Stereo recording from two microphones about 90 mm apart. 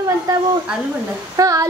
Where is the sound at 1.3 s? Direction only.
40° right (ahead or behind).